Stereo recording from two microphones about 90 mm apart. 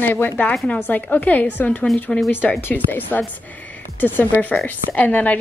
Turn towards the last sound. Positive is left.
turn(degrees=15)  # may be behind; listen again after turning